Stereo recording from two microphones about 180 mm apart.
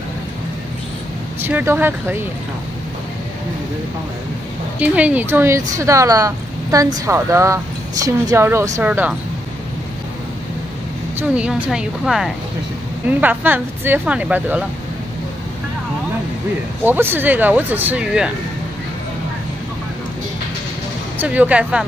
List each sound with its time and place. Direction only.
1.4 s speech: 10° right (ahead or behind)
4.7 s speech: 10° right (ahead or behind)
11.1 s a woman's voice: 5° right (ahead or behind)
16.8 s speech: 10° right (ahead or behind)
21.2 s speech: 10° right (ahead or behind)